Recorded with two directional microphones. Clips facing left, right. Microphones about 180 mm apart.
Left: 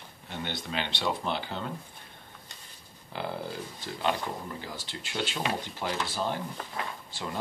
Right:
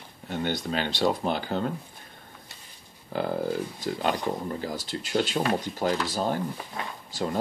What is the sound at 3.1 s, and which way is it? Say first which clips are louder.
Speech: right 8 dB; 45° right (ahead or behind).